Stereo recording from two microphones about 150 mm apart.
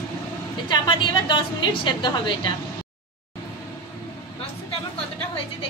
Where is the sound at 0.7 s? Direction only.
30° left (ahead or behind).